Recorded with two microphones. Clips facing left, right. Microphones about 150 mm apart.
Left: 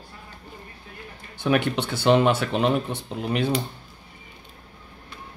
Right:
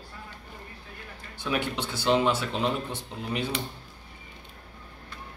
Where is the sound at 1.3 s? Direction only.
60° left (ahead or behind).